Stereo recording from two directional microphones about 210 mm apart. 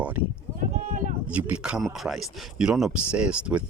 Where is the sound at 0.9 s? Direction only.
35° right (ahead or behind).